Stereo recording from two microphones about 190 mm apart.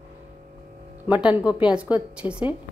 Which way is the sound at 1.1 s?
5° right (ahead or behind).